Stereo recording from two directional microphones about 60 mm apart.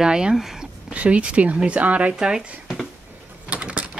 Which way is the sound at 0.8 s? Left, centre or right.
Centre.